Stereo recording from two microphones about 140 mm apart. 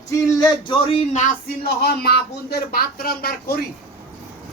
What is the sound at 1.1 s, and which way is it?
Speech, 75° left (ahead or behind).